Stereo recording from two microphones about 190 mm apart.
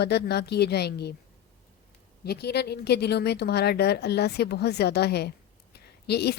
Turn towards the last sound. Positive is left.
turn(degrees=60)  # may be behind; listen again after turning